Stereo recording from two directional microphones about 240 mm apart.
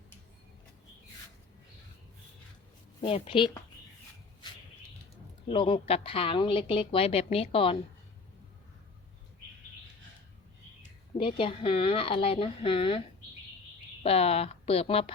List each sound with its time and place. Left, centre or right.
3.0 s a woman's voice: left
5.5 s a woman's voice: left
11.2 s a woman's voice: left